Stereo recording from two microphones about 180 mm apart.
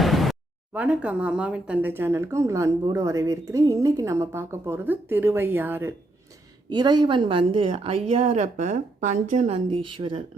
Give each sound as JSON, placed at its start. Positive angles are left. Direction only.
{"t": 0.0, "sound": "a sound", "side_deg": 0}
{"t": 0.7, "sound": "speech", "side_deg": -5}
{"t": 6.7, "sound": "a woman's voice", "side_deg": -25}
{"t": 9.6, "sound": "a woman's voice", "side_deg": -30}